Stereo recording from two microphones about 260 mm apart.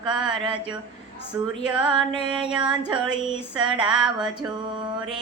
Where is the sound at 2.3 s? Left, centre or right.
Centre.